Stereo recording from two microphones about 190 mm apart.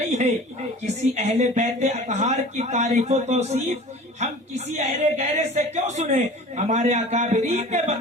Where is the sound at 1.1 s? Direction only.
35° right (ahead or behind).